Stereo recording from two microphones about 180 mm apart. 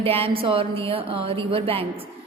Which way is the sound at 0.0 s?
30° right (ahead or behind).